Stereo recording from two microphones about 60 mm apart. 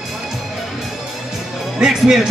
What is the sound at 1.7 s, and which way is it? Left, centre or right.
Speech, centre.